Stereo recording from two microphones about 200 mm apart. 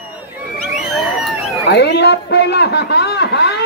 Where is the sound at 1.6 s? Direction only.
55° left (ahead or behind).